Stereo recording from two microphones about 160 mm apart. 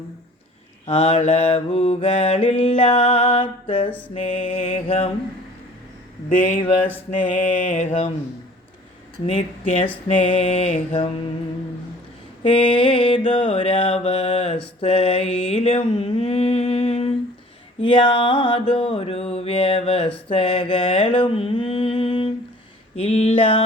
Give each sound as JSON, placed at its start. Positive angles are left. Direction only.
{"t": 0.9, "sound": "mantra", "side_deg": 40}
{"t": 6.2, "sound": "mantra", "side_deg": 50}
{"t": 9.2, "sound": "mantra", "side_deg": 35}
{"t": 12.4, "sound": "mantra", "side_deg": 30}